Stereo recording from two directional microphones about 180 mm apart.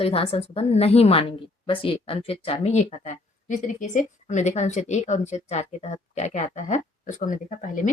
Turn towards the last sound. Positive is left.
turn(degrees=45)  # may be behind; listen again after turning